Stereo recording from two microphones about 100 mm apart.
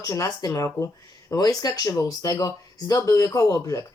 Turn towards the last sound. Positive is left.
turn(degrees=35)  # may be behind; listen again after turning